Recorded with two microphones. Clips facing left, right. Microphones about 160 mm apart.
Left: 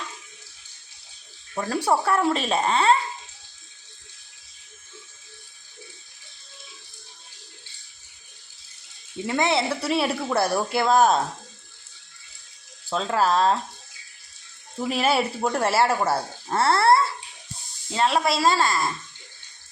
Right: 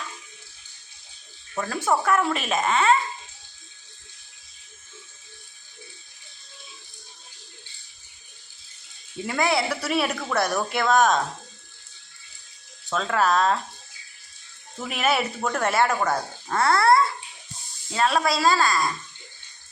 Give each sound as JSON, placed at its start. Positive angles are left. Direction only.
{"t": 1.6, "sound": "speech", "side_deg": 35}
{"t": 9.2, "sound": "speech", "side_deg": 25}
{"t": 12.9, "sound": "speech", "side_deg": 30}
{"t": 14.8, "sound": "speech", "side_deg": 30}